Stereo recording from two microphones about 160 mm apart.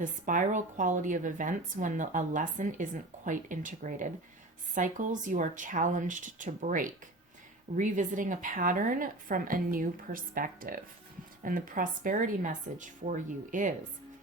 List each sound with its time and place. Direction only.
0.0 s a woman's voice: 55° right (ahead or behind)